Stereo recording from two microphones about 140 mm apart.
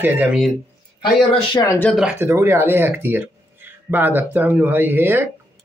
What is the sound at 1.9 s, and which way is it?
Speech, 10° right (ahead or behind).